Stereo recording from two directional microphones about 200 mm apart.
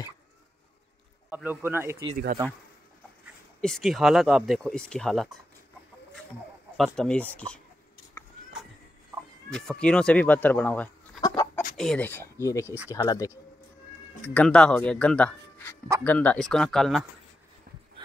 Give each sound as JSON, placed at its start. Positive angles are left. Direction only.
{"t": 1.3, "sound": "speech", "side_deg": -10}
{"t": 3.6, "sound": "speech", "side_deg": 0}
{"t": 6.8, "sound": "speech", "side_deg": 5}
{"t": 9.5, "sound": "speech", "side_deg": 5}
{"t": 11.1, "sound": "chicken", "side_deg": 20}
{"t": 11.7, "sound": "speech", "side_deg": 0}
{"t": 14.2, "sound": "speech", "side_deg": 5}
{"t": 18.0, "sound": "heart murmur", "side_deg": -25}